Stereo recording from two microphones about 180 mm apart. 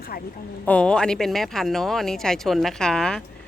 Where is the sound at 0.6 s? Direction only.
5° left (ahead or behind).